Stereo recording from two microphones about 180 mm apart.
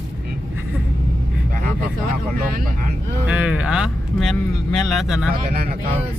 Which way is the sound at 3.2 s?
5° right (ahead or behind).